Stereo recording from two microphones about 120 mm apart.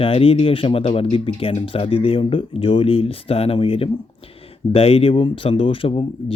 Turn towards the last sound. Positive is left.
turn(degrees=50)  # may be behind; listen again after turning